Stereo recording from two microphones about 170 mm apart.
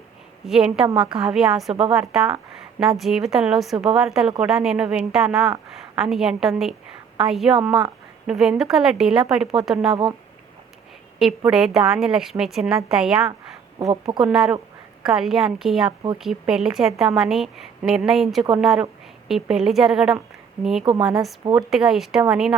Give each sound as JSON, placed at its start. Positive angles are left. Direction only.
{"t": 0.4, "sound": "a woman's voice", "side_deg": -5}
{"t": 9.9, "sound": "speech", "side_deg": -30}
{"t": 11.2, "sound": "a woman's voice", "side_deg": -5}